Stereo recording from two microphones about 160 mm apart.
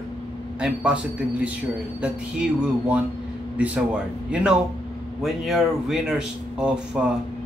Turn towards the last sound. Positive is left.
turn(degrees=-5)  # may be behind; listen again after turning